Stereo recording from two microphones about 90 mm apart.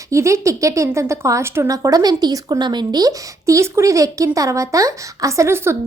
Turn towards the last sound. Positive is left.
turn(degrees=-30)  # may be behind; listen again after turning